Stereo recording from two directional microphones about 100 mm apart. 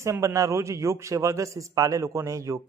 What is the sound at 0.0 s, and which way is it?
A man's voice, 30° right (ahead or behind).